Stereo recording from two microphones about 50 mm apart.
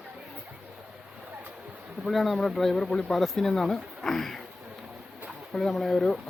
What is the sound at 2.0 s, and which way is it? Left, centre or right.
Speech, centre.